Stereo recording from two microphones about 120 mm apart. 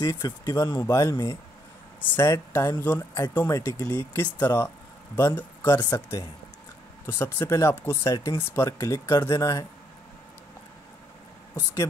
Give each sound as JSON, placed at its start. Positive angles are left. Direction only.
{"t": 0.0, "sound": "speech", "side_deg": 30}